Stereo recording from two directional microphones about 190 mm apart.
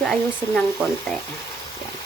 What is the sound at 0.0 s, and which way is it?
Speech, 5° left (ahead or behind).